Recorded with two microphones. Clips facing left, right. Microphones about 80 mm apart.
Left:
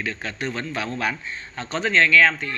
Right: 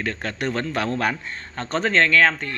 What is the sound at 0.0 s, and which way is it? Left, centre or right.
Speech, right.